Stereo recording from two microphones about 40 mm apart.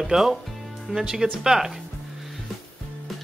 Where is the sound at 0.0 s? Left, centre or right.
Centre.